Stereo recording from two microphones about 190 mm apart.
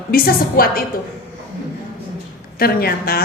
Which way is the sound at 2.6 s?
50° left (ahead or behind).